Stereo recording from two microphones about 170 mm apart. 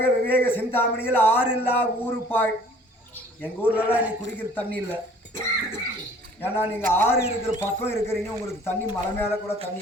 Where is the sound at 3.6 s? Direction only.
10° right (ahead or behind).